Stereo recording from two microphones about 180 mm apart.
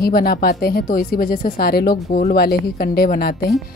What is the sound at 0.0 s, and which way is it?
Speech, 55° left (ahead or behind).